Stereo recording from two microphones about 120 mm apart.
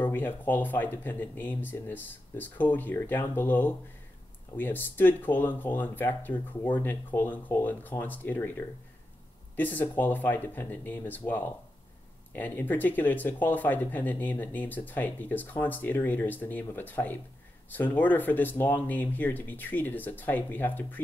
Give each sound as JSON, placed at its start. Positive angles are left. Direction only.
{"t": 0.0, "sound": "speech", "side_deg": 15}